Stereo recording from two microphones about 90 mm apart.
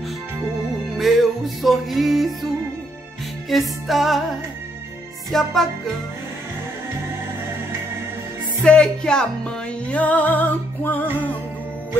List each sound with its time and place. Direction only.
0.8 s music: centre (ahead or behind)
3.4 s music: centre (ahead or behind)
8.6 s speech: 10° left (ahead or behind)
9.8 s music: 15° left (ahead or behind)